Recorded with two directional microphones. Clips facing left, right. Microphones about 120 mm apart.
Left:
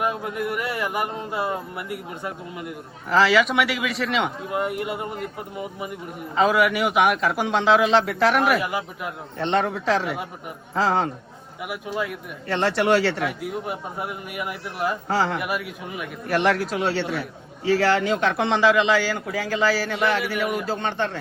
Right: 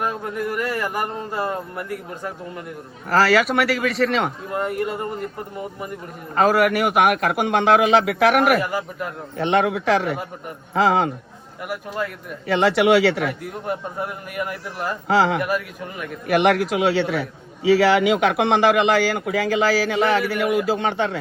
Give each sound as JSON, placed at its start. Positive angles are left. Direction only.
{"t": 0.0, "sound": "a man's voice", "side_deg": 10}
{"t": 3.8, "sound": "a man's voice", "side_deg": 0}
{"t": 6.3, "sound": "a man's voice", "side_deg": -55}
{"t": 8.6, "sound": "a man's voice", "side_deg": 10}
{"t": 9.4, "sound": "a man's voice", "side_deg": -70}
{"t": 11.6, "sound": "a man's voice", "side_deg": 5}
{"t": 12.5, "sound": "a man's voice", "side_deg": -75}
{"t": 13.2, "sound": "a man's voice", "side_deg": 5}
{"t": 15.0, "sound": "a man's voice", "side_deg": -75}
{"t": 15.4, "sound": "a man's voice", "side_deg": 10}
{"t": 16.2, "sound": "a man's voice", "side_deg": -70}